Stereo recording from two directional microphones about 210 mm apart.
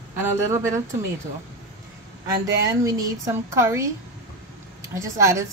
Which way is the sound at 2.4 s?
15° right (ahead or behind).